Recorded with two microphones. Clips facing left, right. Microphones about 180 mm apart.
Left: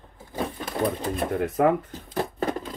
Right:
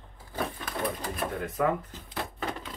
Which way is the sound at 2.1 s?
45° left (ahead or behind).